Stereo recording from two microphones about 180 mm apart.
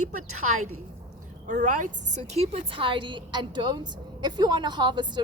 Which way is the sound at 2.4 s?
35° right (ahead or behind).